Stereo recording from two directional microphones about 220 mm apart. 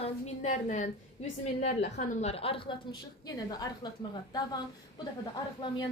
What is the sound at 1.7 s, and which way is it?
Speech, 50° left (ahead or behind).